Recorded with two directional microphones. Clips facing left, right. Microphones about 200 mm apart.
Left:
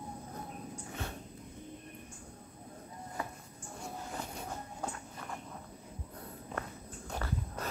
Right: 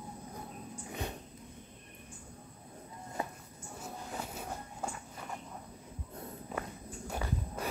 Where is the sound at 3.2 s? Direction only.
25° right (ahead or behind).